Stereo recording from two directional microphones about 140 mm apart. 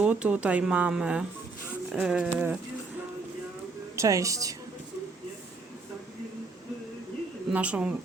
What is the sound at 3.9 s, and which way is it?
Speech, 25° right (ahead or behind).